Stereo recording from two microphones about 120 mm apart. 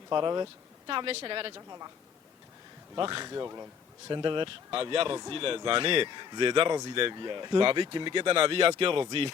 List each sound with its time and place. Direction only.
0.1 s speech: 35° right (ahead or behind)
0.9 s speech: 50° right (ahead or behind)
1.5 s a woman's voice: 30° right (ahead or behind)
2.9 s speech: 45° right (ahead or behind)
3.2 s speech: 30° right (ahead or behind)
4.1 s speech: 45° right (ahead or behind)